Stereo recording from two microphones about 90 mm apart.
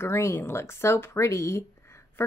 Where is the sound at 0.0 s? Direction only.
30° left (ahead or behind).